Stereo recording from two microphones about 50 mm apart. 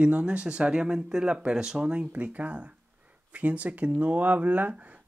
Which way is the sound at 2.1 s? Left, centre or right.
Right.